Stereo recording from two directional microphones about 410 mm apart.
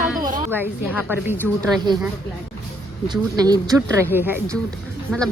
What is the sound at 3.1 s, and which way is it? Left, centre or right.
A woman's voice, centre.